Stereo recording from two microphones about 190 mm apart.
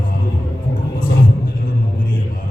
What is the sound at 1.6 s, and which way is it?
Music, 45° left (ahead or behind).